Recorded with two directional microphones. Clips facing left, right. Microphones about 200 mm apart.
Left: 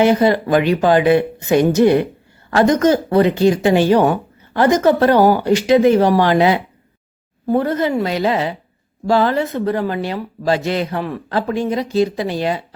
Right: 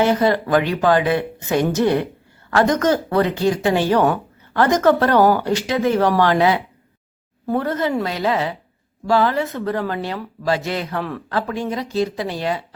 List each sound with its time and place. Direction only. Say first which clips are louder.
0.0 s a woman's voice: left 3 dB; 15° left (ahead or behind)
10.4 s speech: left 4 dB; 25° left (ahead or behind)
11.0 s a woman's voice: left 3 dB; 10° left (ahead or behind)